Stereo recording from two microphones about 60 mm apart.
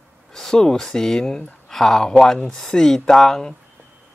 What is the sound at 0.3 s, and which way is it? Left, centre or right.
Speech, centre.